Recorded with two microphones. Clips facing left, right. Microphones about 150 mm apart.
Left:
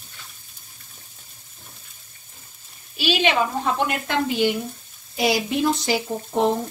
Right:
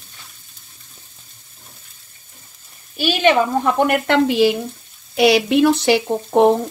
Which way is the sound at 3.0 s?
50° right (ahead or behind).